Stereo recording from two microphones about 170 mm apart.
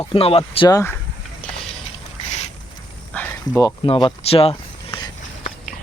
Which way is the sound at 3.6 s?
25° left (ahead or behind).